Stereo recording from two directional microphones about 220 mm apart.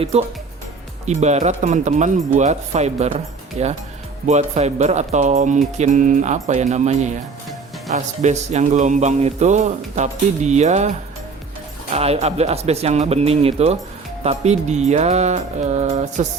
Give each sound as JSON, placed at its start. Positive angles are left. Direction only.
{"t": 0.0, "sound": "speech", "side_deg": -25}